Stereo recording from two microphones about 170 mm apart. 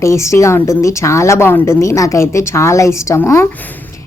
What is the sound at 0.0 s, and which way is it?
A woman's voice, 15° left (ahead or behind).